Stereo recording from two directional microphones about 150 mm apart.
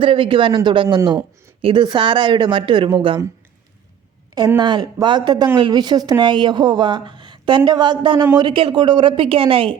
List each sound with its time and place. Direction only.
0.0 s speech: 35° right (ahead or behind)
4.4 s speech: 25° right (ahead or behind)